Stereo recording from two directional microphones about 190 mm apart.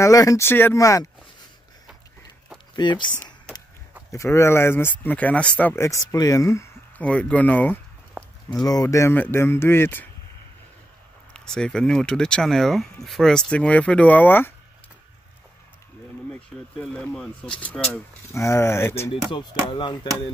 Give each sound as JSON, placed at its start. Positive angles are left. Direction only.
{"t": 0.0, "sound": "speech", "side_deg": 15}
{"t": 2.7, "sound": "speech", "side_deg": 25}
{"t": 4.1, "sound": "speech", "side_deg": 15}
{"t": 8.5, "sound": "speech", "side_deg": 20}
{"t": 11.3, "sound": "speech", "side_deg": 5}
{"t": 16.3, "sound": "speech", "side_deg": 5}
{"t": 19.3, "sound": "speech", "side_deg": 25}